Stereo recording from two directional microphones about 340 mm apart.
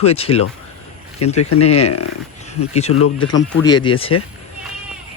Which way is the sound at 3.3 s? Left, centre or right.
Centre.